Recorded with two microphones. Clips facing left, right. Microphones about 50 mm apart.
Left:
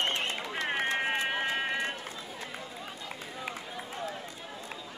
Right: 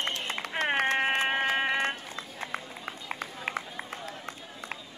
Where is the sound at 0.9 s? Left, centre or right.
Right.